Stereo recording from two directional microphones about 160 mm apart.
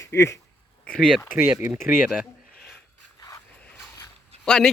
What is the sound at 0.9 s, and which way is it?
Speech, 5° left (ahead or behind).